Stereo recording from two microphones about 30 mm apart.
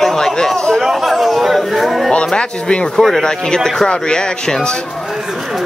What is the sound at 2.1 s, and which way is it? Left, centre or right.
Speech, left.